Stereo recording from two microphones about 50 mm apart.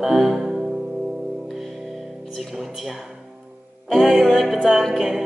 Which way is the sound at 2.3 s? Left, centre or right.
Centre.